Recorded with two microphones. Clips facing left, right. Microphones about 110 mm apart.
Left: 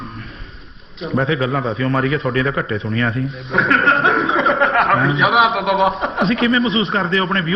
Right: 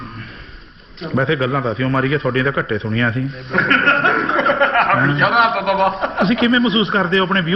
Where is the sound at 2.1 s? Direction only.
30° right (ahead or behind).